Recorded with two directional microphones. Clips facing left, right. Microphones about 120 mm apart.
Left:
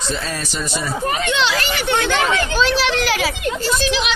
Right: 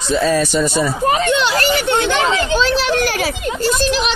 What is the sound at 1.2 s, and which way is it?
Speech, 50° right (ahead or behind).